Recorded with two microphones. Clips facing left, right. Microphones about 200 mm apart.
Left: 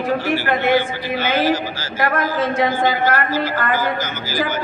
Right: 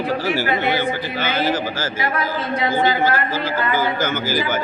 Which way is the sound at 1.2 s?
50° right (ahead or behind).